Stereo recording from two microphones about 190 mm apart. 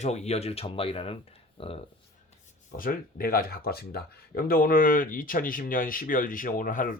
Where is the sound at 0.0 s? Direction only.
35° left (ahead or behind).